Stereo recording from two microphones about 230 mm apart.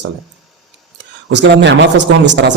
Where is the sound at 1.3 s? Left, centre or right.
Right.